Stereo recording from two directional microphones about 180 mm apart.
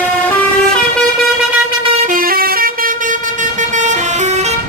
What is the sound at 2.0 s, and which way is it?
Vehicle, 50° right (ahead or behind).